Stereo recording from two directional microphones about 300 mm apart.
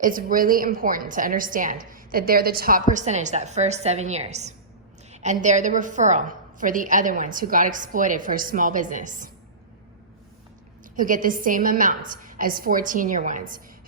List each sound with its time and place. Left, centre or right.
0.0 s a woman's voice: right
10.9 s a woman's voice: right